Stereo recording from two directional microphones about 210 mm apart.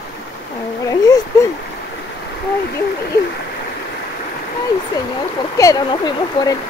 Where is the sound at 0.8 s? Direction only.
15° left (ahead or behind).